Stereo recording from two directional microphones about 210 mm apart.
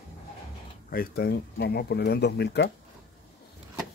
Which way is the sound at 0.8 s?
45° left (ahead or behind).